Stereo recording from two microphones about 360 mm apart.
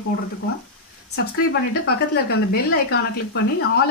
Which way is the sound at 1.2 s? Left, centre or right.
Left.